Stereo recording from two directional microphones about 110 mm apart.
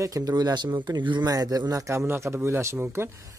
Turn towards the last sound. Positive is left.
turn(degrees=-20)  # may be behind; listen again after turning